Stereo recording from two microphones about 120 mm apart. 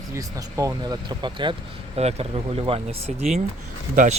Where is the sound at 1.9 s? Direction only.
60° right (ahead or behind).